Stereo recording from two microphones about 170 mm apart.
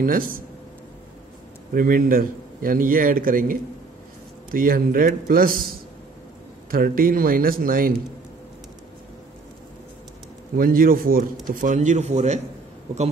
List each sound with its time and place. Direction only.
0.0 s a man's voice: 55° right (ahead or behind)
1.7 s a man's voice: 55° right (ahead or behind)
6.7 s a man's voice: 60° right (ahead or behind)
10.5 s a man's voice: 60° right (ahead or behind); by 12.4 s 40° right (ahead or behind)